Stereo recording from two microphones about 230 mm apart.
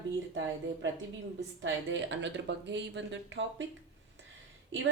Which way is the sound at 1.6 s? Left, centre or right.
Right.